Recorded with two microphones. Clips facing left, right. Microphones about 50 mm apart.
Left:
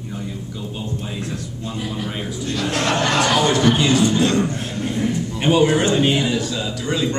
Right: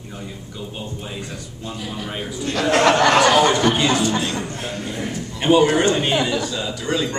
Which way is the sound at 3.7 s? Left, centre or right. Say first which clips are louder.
Left 2 dB; centre.